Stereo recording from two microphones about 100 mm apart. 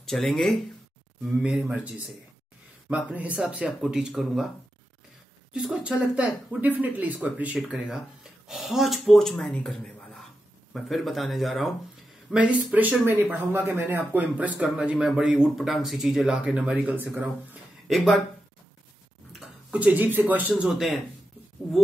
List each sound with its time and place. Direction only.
0.0 s speech: 5° left (ahead or behind)
1.5 s speech: 10° right (ahead or behind)
5.5 s speech: 10° right (ahead or behind)
7.7 s speech: 5° right (ahead or behind); by 10.0 s 10° left (ahead or behind)
10.7 s speech: centre (ahead or behind)
12.4 s speech: 15° right (ahead or behind)
17.8 s speech: centre (ahead or behind)
19.7 s speech: 15° right (ahead or behind)
20.6 s speech: 5° right (ahead or behind)